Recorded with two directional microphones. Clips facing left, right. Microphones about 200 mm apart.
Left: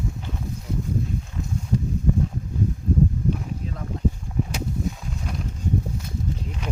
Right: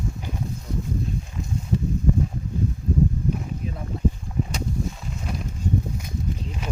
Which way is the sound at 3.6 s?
10° right (ahead or behind).